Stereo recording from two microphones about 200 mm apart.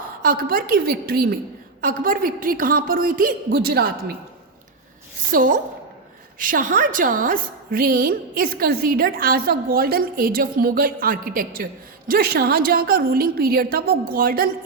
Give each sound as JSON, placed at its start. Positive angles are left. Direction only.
{"t": 0.2, "sound": "a woman's voice", "side_deg": -45}
{"t": 5.3, "sound": "a woman's voice", "side_deg": -45}